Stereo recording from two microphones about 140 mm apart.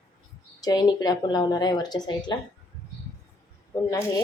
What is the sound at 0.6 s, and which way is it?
Speech, 30° left (ahead or behind).